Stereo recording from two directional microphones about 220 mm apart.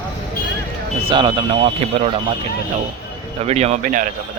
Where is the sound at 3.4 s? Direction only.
30° right (ahead or behind).